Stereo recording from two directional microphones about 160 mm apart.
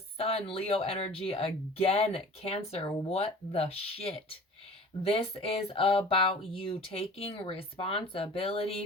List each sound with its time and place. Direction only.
0.2 s speech: 40° left (ahead or behind)